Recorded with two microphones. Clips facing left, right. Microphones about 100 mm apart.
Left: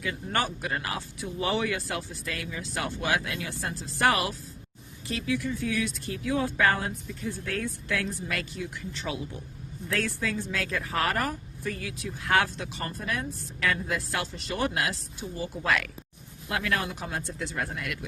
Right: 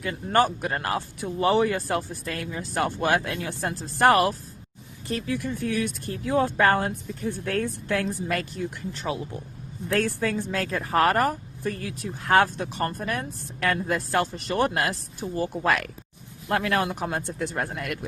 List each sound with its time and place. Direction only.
0.0 s speech: 40° right (ahead or behind)
3.5 s a woman's voice: 55° right (ahead or behind)
7.2 s a woman's voice: 55° right (ahead or behind)